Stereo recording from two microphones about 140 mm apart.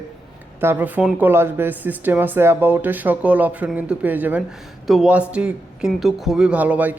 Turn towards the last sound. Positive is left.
turn(degrees=-10)  # may be behind; listen again after turning